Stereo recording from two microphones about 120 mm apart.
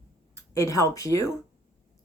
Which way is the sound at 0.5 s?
25° left (ahead or behind).